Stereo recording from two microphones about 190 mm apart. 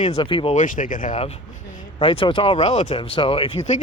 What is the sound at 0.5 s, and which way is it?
Speech, 45° left (ahead or behind).